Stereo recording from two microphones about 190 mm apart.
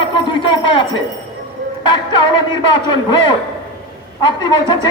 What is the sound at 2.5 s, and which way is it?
Speech, 25° left (ahead or behind).